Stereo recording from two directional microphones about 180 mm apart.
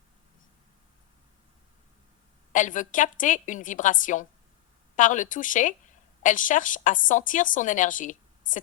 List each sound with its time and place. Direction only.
2.5 s speech: 45° left (ahead or behind)